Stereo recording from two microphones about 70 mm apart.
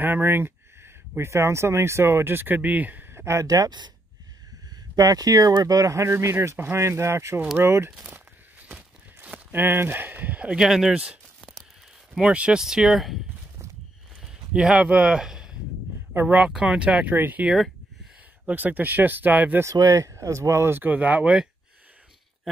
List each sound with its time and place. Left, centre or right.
0.0 s speech: right
3.3 s speech: right
4.9 s speech: right
6.1 s speech: right
8.0 s a sound: right
9.5 s speech: right; by 13.2 s centre
14.2 s speech: centre
16.1 s speech: right
17.1 s speech: right
19.6 s speech: right
20.2 s speech: right; by 21.5 s centre